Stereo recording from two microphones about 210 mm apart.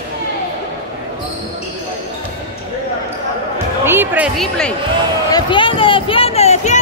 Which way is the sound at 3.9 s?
10° right (ahead or behind).